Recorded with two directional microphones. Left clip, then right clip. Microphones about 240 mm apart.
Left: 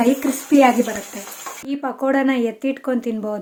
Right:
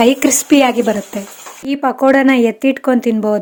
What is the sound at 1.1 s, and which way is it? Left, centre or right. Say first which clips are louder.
Speech: right 9 dB; right.